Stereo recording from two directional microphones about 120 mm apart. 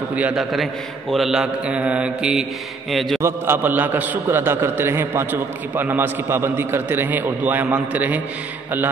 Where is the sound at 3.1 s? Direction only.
20° right (ahead or behind).